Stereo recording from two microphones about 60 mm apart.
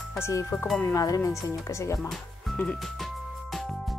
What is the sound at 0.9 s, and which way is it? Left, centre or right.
Tuning fork, left.